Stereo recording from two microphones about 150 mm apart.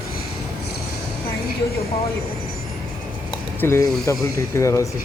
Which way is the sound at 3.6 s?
15° left (ahead or behind).